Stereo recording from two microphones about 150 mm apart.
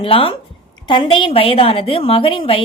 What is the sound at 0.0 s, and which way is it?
A woman's voice, 35° left (ahead or behind).